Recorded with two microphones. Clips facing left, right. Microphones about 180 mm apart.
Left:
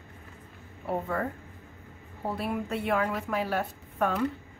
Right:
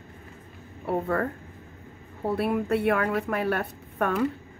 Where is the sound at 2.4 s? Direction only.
60° right (ahead or behind).